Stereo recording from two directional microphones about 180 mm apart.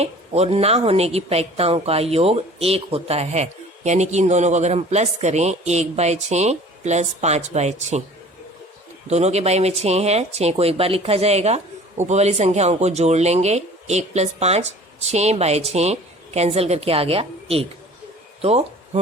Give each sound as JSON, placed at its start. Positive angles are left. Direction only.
{"t": 0.0, "sound": "speech", "side_deg": -35}
{"t": 9.0, "sound": "speech", "side_deg": -35}